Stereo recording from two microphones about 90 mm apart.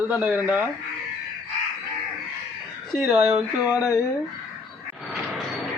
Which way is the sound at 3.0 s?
10° right (ahead or behind).